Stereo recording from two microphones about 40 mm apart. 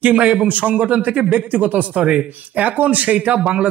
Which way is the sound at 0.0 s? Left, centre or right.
Right.